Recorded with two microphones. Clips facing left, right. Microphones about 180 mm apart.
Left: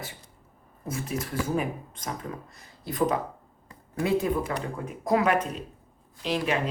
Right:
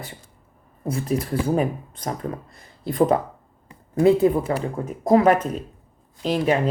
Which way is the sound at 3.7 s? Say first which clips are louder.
Right 9 dB; 25° right (ahead or behind).